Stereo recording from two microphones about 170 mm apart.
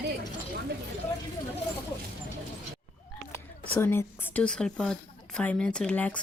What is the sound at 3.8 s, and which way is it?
A woman's voice, 15° left (ahead or behind).